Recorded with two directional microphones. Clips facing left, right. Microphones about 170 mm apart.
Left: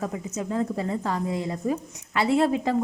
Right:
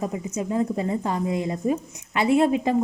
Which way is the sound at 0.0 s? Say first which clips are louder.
Right 2 dB; 15° right (ahead or behind).